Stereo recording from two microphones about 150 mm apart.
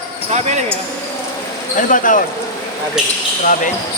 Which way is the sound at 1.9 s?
60° left (ahead or behind).